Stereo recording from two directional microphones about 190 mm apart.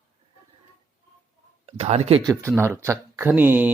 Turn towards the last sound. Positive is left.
turn(degrees=-10)  # may be behind; listen again after turning